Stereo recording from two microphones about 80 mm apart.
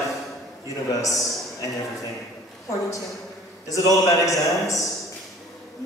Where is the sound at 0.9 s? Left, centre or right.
Left.